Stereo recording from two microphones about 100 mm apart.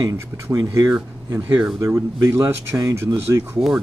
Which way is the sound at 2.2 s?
35° right (ahead or behind).